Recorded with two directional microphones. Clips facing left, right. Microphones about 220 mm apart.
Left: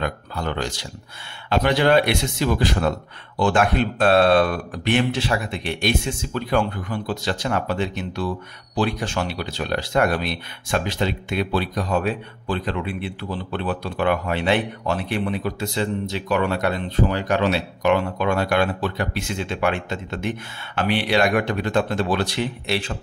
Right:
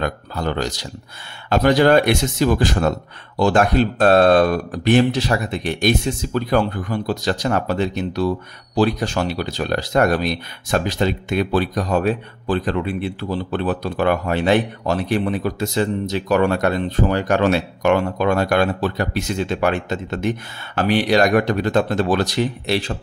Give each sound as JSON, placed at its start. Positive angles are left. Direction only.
{"t": 0.0, "sound": "speech", "side_deg": -40}